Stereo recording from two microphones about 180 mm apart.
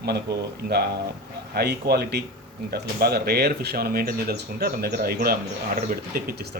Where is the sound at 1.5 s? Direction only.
60° right (ahead or behind).